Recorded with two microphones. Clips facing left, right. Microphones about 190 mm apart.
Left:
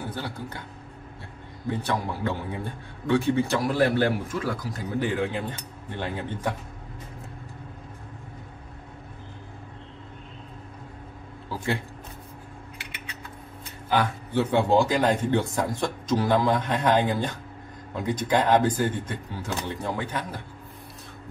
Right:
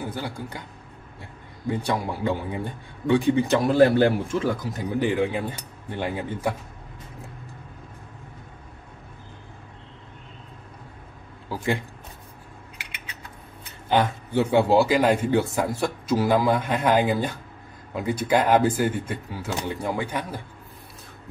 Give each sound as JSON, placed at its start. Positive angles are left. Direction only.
{"t": 0.0, "sound": "a man's voice", "side_deg": -10}
{"t": 1.7, "sound": "a man's voice", "side_deg": -10}
{"t": 11.4, "sound": "a sound", "side_deg": -15}
{"t": 13.8, "sound": "speech", "side_deg": -20}
{"t": 14.4, "sound": "a man's voice", "side_deg": -10}